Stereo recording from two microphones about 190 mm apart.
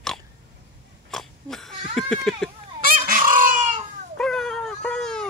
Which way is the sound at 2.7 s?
50° right (ahead or behind).